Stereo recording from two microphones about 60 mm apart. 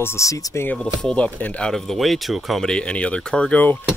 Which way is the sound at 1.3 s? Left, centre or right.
Left.